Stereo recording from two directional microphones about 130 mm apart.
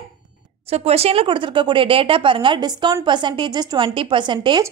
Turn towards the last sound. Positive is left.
turn(degrees=-35)  # may be behind; listen again after turning